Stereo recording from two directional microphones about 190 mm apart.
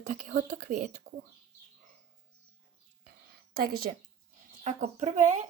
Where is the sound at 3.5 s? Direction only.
50° right (ahead or behind).